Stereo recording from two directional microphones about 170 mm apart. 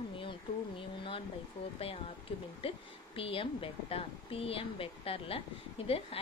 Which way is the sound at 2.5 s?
35° left (ahead or behind).